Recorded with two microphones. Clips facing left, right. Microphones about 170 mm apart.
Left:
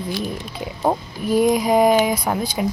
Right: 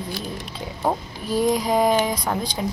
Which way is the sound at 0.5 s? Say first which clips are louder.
Left 3 dB; 15° left (ahead or behind).